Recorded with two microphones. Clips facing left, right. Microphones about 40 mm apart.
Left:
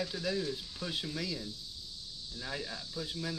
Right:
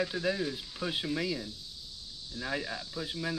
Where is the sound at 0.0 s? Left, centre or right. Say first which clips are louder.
Right 4 dB; right.